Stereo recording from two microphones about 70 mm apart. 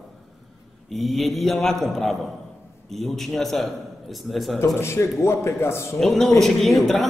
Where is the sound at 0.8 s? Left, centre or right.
Centre.